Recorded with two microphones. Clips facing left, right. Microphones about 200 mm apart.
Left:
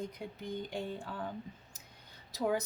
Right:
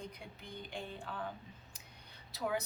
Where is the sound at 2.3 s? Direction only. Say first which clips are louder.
Left 5 dB; 40° left (ahead or behind).